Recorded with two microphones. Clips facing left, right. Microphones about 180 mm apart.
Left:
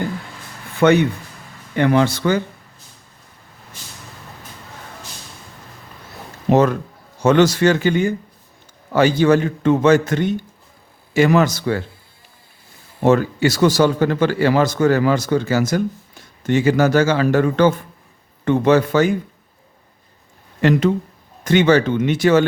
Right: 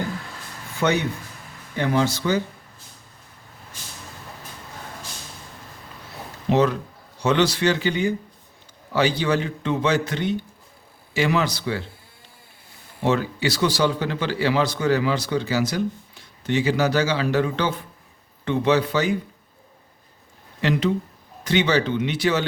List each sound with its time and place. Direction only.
0.8 s speech: 60° left (ahead or behind)
6.5 s a man's voice: 50° left (ahead or behind)
13.0 s speech: 45° left (ahead or behind)
20.6 s speech: 50° left (ahead or behind)